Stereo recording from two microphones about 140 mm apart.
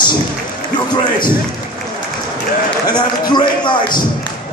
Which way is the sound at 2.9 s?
30° left (ahead or behind).